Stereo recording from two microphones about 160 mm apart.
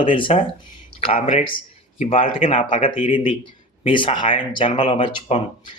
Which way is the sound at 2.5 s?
35° left (ahead or behind).